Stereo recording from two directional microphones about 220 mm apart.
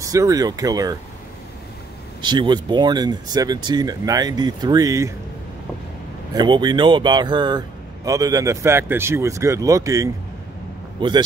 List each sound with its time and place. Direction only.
0.0 s speech: 15° right (ahead or behind)
2.2 s speech: 20° right (ahead or behind)
6.3 s speech: 20° right (ahead or behind)